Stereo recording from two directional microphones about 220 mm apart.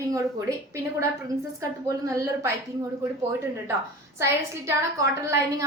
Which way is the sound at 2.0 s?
15° right (ahead or behind).